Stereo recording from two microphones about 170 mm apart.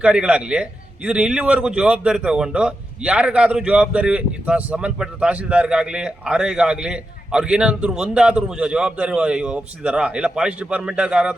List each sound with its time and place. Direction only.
0.0 s a man's voice: 5° right (ahead or behind)